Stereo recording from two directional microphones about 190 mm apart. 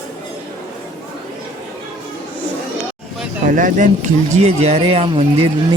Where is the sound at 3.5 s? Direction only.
45° right (ahead or behind).